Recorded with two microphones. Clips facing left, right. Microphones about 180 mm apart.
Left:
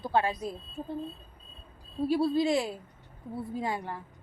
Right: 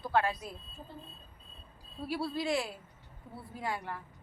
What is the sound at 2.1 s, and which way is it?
A woman's voice, 25° left (ahead or behind).